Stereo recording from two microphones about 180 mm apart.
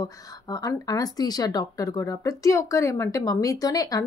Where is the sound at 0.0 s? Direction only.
20° left (ahead or behind).